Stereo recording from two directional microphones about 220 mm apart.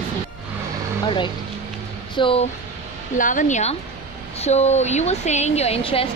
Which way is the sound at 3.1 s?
35° left (ahead or behind).